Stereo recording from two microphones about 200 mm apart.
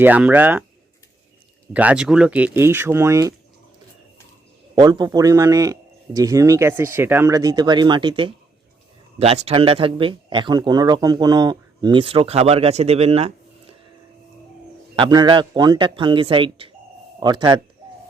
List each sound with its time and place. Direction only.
0.0 s speech: 10° right (ahead or behind)
1.7 s speech: 5° right (ahead or behind)
4.7 s speech: 20° right (ahead or behind)
14.9 s speech: 20° right (ahead or behind)